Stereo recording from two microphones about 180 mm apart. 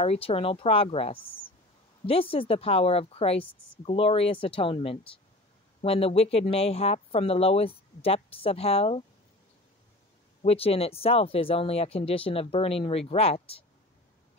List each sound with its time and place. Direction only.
0.0 s speech: 35° left (ahead or behind)
10.4 s speech: 35° left (ahead or behind)